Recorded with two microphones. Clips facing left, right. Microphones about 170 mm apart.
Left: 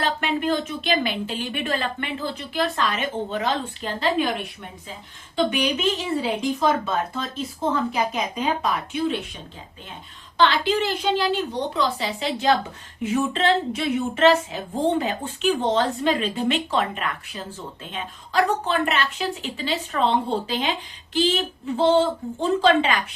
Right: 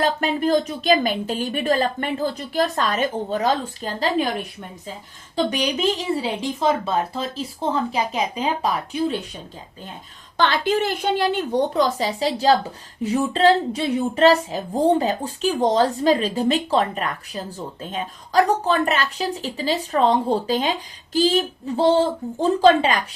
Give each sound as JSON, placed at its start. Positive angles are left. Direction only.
{"t": 0.0, "sound": "speech", "side_deg": -40}
{"t": 5.5, "sound": "speech", "side_deg": -35}
{"t": 10.3, "sound": "a woman's voice", "side_deg": -50}
{"t": 22.6, "sound": "speech", "side_deg": -40}